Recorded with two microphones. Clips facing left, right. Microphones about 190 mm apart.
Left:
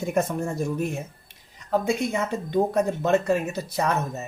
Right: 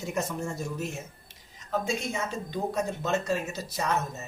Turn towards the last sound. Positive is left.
turn(degrees=60)  # may be behind; listen again after turning